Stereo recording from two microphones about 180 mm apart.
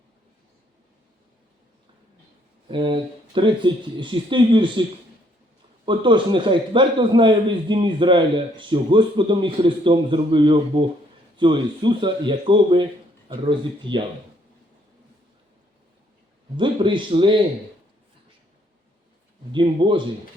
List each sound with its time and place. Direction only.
2.6 s a man's voice: 25° right (ahead or behind)
5.8 s a man's voice: 25° right (ahead or behind)
16.6 s a man's voice: 25° right (ahead or behind)
19.5 s a man's voice: 25° right (ahead or behind)